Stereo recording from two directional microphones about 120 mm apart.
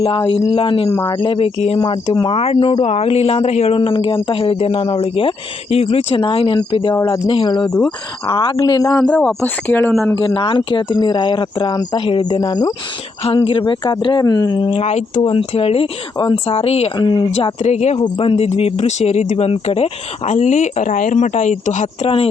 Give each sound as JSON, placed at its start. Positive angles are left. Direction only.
{"t": 0.3, "sound": "speech", "side_deg": 50}
{"t": 0.9, "sound": "speech", "side_deg": 25}
{"t": 1.2, "sound": "speech", "side_deg": 45}
{"t": 6.9, "sound": "speech", "side_deg": 25}
{"t": 7.3, "sound": "speech", "side_deg": 40}
{"t": 9.0, "sound": "speech", "side_deg": 10}
{"t": 10.2, "sound": "speech", "side_deg": 45}
{"t": 13.2, "sound": "speech", "side_deg": 45}
{"t": 14.7, "sound": "speech", "side_deg": 70}
{"t": 15.2, "sound": "speech", "side_deg": 50}
{"t": 17.0, "sound": "speech", "side_deg": 35}
{"t": 17.3, "sound": "speech", "side_deg": 65}
{"t": 18.2, "sound": "speech", "side_deg": 55}